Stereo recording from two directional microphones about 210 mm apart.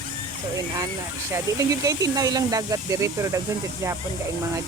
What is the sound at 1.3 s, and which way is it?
Speech, 15° right (ahead or behind).